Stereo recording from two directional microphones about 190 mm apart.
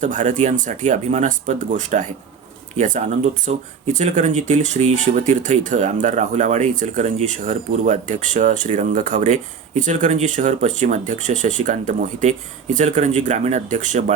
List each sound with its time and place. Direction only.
0.0 s speech: 40° right (ahead or behind)